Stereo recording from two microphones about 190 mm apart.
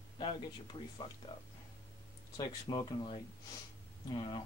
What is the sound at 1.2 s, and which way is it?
Speech, 25° left (ahead or behind).